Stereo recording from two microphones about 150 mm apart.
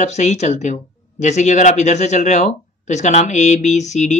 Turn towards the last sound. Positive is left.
turn(degrees=50)  # may be behind; listen again after turning